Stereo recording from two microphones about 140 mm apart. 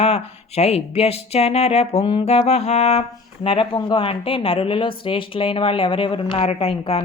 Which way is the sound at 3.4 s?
40° left (ahead or behind).